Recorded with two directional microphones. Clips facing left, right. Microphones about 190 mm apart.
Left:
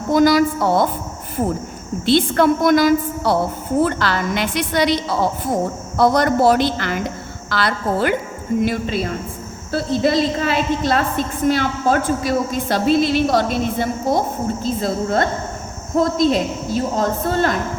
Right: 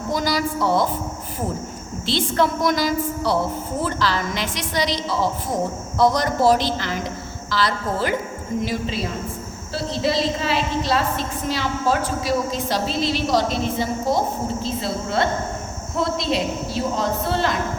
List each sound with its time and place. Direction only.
0.1 s a woman's voice: 55° left (ahead or behind)
2.0 s a woman's voice: 55° left (ahead or behind)